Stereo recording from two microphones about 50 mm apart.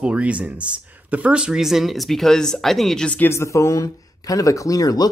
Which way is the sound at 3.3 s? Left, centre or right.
Left.